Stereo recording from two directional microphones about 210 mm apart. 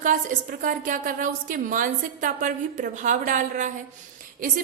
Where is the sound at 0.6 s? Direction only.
40° right (ahead or behind).